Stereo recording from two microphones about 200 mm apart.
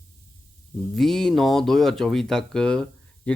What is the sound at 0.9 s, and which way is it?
Speech, centre (ahead or behind).